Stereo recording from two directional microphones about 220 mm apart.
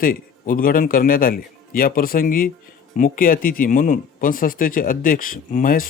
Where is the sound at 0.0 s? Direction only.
40° left (ahead or behind).